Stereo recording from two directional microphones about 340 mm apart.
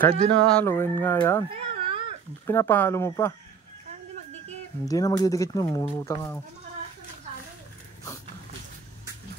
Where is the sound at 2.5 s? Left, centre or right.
Centre.